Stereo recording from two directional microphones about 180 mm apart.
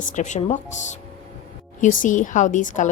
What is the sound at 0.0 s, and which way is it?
A woman's voice, 45° left (ahead or behind).